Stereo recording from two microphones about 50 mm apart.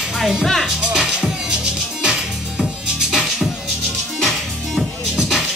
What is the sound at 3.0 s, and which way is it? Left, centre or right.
Music, centre.